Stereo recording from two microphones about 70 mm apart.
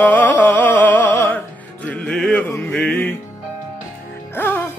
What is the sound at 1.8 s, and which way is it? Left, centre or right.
Music, centre.